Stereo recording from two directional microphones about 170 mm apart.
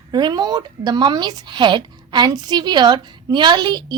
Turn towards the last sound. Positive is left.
turn(degrees=-25)  # may be behind; listen again after turning